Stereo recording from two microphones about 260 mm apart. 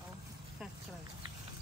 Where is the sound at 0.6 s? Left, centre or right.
Centre.